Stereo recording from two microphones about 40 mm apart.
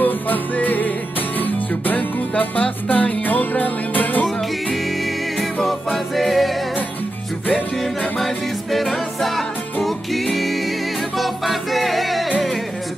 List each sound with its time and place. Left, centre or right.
0.0 s music: left
5.7 s music: centre
8.7 s music: centre